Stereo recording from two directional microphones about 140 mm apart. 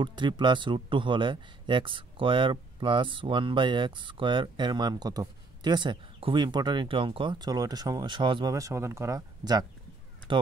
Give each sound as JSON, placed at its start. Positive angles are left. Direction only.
{"t": 0.0, "sound": "speech", "side_deg": -35}
{"t": 8.5, "sound": "speech", "side_deg": -20}